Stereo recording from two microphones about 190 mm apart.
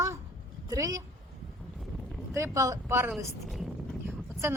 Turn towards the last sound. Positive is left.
turn(degrees=0)  # may be behind; listen again after turning